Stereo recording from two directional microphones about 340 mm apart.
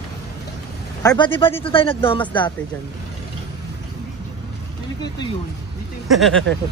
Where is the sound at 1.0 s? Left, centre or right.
Centre.